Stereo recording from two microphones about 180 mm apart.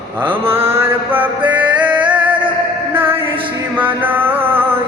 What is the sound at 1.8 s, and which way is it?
Music, 10° right (ahead or behind).